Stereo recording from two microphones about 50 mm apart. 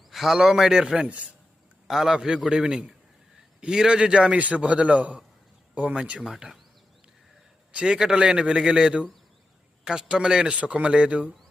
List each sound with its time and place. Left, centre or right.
0.1 s a man's voice: centre
1.0 s a man's voice: right
1.9 s a man's voice: centre; by 6.0 s right
6.0 s a man's voice: centre
6.3 s speech: centre
7.7 s a man's voice: right